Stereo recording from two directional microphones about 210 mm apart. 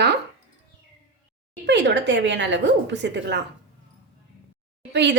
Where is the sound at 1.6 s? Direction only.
55° right (ahead or behind).